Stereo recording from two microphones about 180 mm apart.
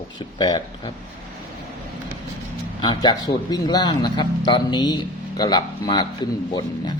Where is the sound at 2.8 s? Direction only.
25° left (ahead or behind).